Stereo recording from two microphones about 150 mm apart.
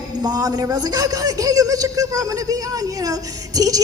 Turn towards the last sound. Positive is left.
turn(degrees=-25)  # may be behind; listen again after turning